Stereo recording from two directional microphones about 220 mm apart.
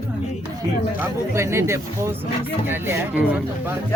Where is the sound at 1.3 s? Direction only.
10° right (ahead or behind).